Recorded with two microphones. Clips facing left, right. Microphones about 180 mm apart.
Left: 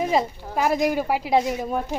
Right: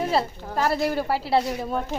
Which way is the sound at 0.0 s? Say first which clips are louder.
Left 2 dB; 15° left (ahead or behind).